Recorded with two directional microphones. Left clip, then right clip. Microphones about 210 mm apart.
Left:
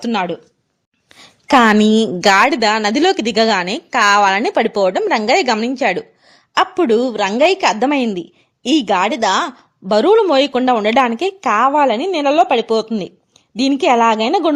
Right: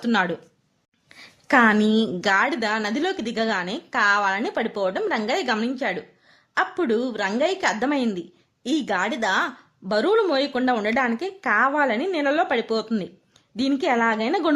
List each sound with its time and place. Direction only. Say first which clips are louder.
0.0 s a woman's voice: left 3 dB; 20° left (ahead or behind)
1.1 s a woman's voice: left 7 dB; 30° left (ahead or behind)